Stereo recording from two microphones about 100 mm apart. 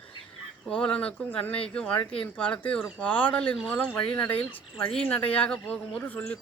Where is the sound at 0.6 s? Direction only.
10° left (ahead or behind).